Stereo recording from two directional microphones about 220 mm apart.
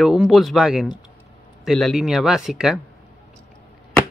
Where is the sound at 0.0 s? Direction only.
Centre (ahead or behind).